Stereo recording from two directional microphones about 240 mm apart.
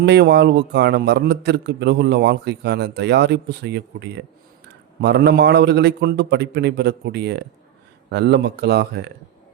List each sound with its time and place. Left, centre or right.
0.0 s a man's voice: right